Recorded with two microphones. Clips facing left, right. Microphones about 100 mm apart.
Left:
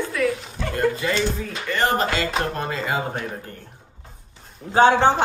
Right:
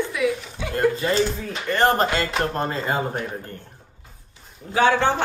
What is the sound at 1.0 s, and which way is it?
Speech, 35° right (ahead or behind).